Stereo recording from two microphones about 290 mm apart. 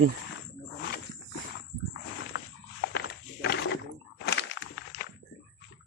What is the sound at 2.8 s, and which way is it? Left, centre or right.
Walk, left.